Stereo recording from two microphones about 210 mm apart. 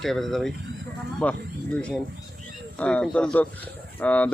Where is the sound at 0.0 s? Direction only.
Centre (ahead or behind).